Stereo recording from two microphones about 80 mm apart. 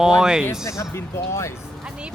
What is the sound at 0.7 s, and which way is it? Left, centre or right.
Speech, left.